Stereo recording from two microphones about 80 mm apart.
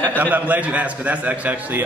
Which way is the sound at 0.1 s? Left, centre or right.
Right.